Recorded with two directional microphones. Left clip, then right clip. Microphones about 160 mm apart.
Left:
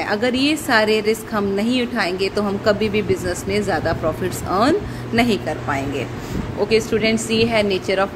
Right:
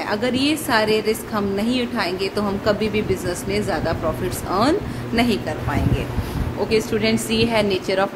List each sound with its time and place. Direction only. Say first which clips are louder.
0.0 s a woman's voice: left 2 dB; 20° left (ahead or behind)
7.0 s a woman's voice: left 2 dB; 5° left (ahead or behind)